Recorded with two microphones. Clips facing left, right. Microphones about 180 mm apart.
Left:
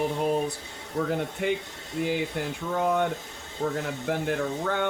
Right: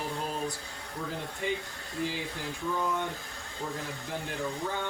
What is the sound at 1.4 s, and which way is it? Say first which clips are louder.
Speech: left 5 dB; 60° left (ahead or behind).